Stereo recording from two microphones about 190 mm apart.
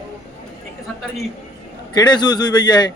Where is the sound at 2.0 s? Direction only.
20° left (ahead or behind).